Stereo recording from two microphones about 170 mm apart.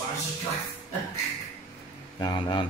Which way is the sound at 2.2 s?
25° left (ahead or behind).